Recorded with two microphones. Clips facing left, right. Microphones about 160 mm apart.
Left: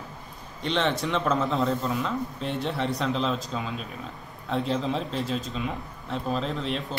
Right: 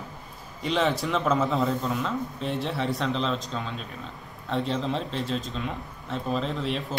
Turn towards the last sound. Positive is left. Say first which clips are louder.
# even
turn(degrees=0)  # may be behind; listen again after turning